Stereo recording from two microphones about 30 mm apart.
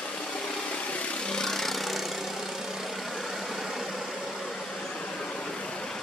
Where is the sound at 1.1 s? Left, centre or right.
Left.